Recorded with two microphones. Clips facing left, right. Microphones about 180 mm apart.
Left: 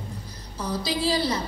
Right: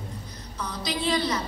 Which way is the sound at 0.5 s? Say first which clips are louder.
Left 4 dB; 30° left (ahead or behind).